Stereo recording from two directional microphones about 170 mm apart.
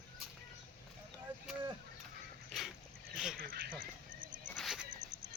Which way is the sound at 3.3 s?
60° right (ahead or behind).